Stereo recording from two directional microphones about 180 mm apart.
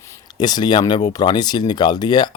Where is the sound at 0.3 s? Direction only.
25° left (ahead or behind).